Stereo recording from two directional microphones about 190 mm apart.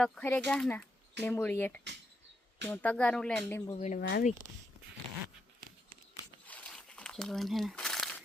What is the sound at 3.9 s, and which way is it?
Speech, 55° left (ahead or behind).